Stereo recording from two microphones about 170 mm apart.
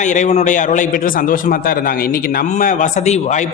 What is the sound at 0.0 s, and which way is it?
A man's voice, 45° left (ahead or behind).